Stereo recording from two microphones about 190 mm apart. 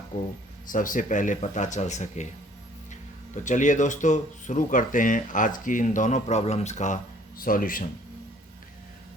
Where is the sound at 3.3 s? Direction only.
40° left (ahead or behind).